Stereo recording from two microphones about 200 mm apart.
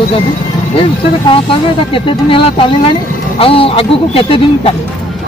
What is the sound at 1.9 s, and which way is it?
Speech, 25° left (ahead or behind).